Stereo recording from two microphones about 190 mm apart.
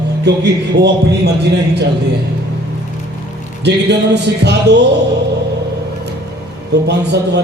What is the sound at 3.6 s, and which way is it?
A man's voice, 65° right (ahead or behind).